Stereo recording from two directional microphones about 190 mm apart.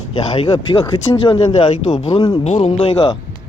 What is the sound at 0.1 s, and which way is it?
A man's voice, 30° left (ahead or behind).